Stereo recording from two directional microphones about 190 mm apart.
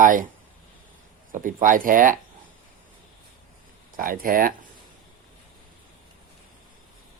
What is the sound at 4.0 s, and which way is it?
Speech, 50° right (ahead or behind).